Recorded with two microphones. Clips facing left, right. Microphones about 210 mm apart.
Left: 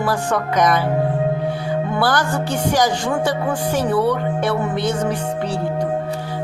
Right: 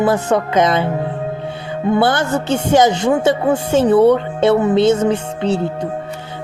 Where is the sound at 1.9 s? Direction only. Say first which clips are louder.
Right 6 dB; 25° right (ahead or behind).